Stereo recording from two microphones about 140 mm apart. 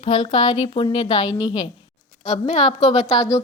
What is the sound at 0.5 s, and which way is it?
Speech, 40° left (ahead or behind).